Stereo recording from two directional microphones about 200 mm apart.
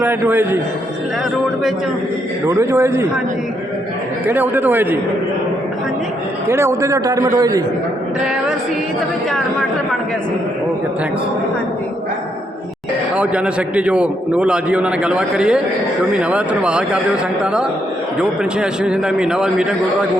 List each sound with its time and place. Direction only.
0.0 s a man's voice: 10° right (ahead or behind)
2.5 s a man's voice: 15° right (ahead or behind)
4.3 s a man's voice: 10° right (ahead or behind)
6.5 s a man's voice: 15° right (ahead or behind)
8.2 s a man's voice: 5° right (ahead or behind)
13.1 s a man's voice: 5° right (ahead or behind)